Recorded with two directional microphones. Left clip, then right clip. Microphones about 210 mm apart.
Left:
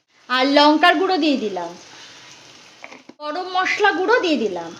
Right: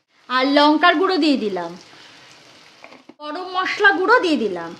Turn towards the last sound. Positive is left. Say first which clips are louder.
# even
turn(degrees=-10)  # may be behind; listen again after turning